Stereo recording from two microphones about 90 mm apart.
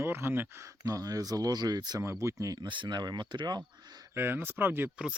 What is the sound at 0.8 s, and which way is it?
Speech, 40° right (ahead or behind).